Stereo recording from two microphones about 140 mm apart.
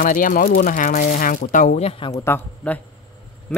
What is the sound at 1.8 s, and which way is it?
Speech, 40° left (ahead or behind).